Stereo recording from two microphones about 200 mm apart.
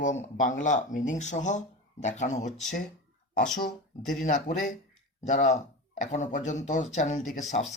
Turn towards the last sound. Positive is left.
turn(degrees=35)  # may be behind; listen again after turning